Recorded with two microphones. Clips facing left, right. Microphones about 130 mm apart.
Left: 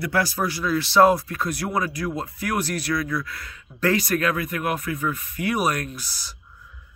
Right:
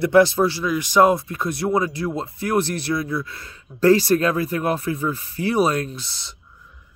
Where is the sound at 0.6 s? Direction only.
15° right (ahead or behind).